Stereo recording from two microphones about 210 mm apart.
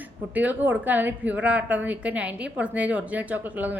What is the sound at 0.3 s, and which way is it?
A woman's voice, 10° right (ahead or behind).